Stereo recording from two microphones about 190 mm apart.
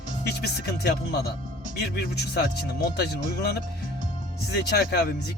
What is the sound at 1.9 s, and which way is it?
Speech, 60° left (ahead or behind).